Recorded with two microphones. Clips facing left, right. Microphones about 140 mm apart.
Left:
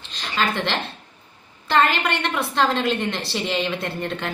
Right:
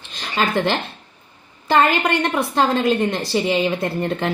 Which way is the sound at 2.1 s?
45° right (ahead or behind).